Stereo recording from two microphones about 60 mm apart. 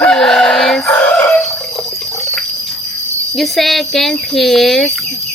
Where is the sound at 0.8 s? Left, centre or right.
Left.